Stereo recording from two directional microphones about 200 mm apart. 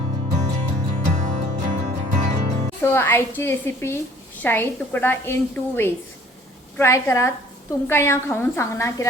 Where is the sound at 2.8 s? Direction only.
10° left (ahead or behind).